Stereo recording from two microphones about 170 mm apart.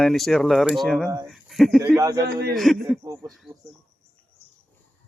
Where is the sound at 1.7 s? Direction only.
20° right (ahead or behind).